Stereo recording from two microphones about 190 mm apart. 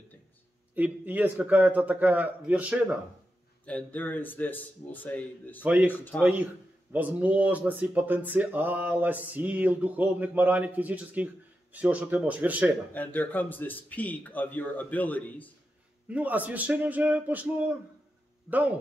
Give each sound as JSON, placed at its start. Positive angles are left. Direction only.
{"t": 0.7, "sound": "speech", "side_deg": -10}
{"t": 3.6, "sound": "a man's voice", "side_deg": 10}
{"t": 5.6, "sound": "speech", "side_deg": -5}
{"t": 5.9, "sound": "a man's voice", "side_deg": 10}
{"t": 6.2, "sound": "speech", "side_deg": -10}
{"t": 12.9, "sound": "a man's voice", "side_deg": 10}
{"t": 16.1, "sound": "speech", "side_deg": -10}
{"t": 18.5, "sound": "speech", "side_deg": -10}